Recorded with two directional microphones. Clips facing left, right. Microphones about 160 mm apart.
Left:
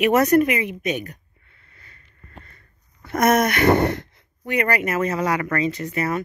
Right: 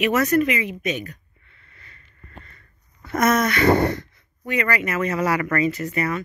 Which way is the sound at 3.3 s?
65° left (ahead or behind).